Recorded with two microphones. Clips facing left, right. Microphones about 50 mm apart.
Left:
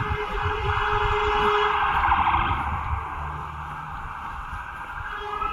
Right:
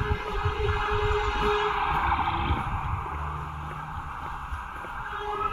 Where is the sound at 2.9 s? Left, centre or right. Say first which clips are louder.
Left 2 dB; centre.